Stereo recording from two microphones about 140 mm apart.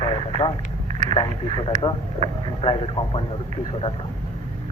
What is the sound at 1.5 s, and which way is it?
A man's voice, 35° left (ahead or behind).